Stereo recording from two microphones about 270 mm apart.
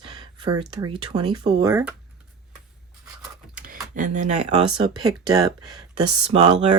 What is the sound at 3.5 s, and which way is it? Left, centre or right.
Speech, right.